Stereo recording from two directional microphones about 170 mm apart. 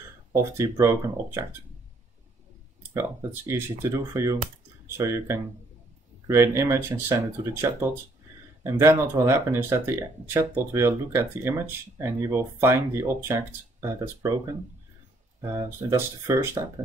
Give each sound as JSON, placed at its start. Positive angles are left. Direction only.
{"t": 0.3, "sound": "speech", "side_deg": -15}
{"t": 2.9, "sound": "speech", "side_deg": -15}
{"t": 15.4, "sound": "speech", "side_deg": -20}